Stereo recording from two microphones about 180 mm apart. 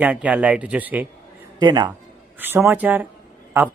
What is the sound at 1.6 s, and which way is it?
Speech, 25° right (ahead or behind).